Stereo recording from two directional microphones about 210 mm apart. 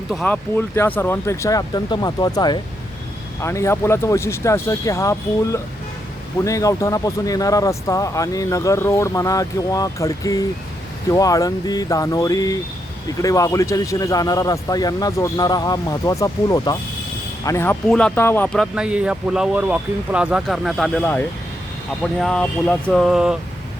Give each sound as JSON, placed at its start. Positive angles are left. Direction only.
{"t": 0.1, "sound": "speech", "side_deg": 5}